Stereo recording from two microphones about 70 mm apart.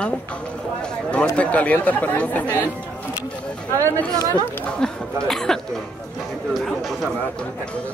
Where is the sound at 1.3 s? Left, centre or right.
Centre.